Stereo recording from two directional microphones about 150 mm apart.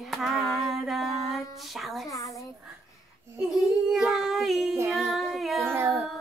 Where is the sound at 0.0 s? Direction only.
Centre (ahead or behind).